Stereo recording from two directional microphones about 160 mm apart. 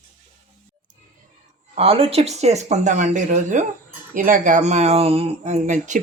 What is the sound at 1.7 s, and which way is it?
Speech, 35° right (ahead or behind).